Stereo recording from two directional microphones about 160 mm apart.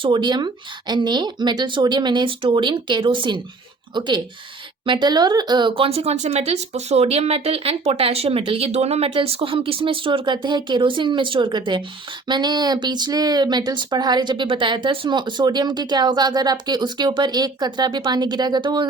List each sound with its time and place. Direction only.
0.0 s speech: 30° right (ahead or behind)